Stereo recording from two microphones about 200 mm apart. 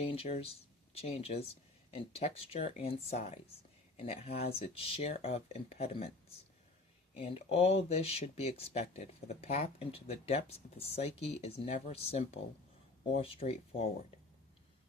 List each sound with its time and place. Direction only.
0.0 s speech: 30° left (ahead or behind)
7.2 s speech: 30° left (ahead or behind)